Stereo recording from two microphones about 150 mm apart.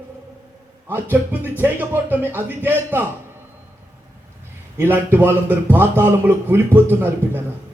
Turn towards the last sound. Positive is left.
turn(degrees=-15)  # may be behind; listen again after turning